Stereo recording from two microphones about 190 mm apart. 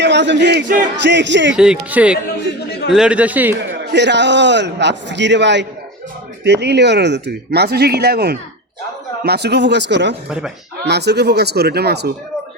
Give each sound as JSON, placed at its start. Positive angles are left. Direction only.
{"t": 0.0, "sound": "a man's voice", "side_deg": -65}
{"t": 1.5, "sound": "speech", "side_deg": -5}
{"t": 3.7, "sound": "a man's voice", "side_deg": -65}
{"t": 10.2, "sound": "speech", "side_deg": -5}
{"t": 10.8, "sound": "speech", "side_deg": -60}